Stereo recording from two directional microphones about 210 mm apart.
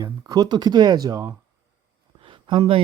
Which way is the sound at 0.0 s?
20° right (ahead or behind).